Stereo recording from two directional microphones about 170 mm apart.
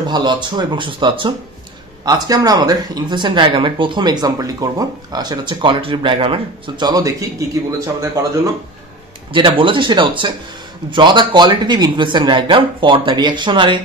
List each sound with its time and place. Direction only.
0.0 s speech: 25° right (ahead or behind)
9.3 s speech: 30° right (ahead or behind)